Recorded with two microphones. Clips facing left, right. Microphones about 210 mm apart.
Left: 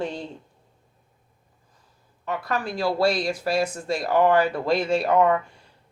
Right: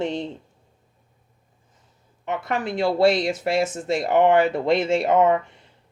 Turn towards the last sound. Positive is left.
turn(degrees=-20)  # may be behind; listen again after turning